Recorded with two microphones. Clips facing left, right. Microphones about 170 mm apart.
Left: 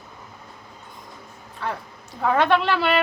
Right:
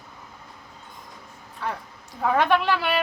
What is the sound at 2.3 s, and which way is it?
Speech, 10° right (ahead or behind).